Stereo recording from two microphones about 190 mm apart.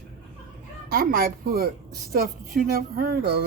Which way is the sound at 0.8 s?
50° right (ahead or behind).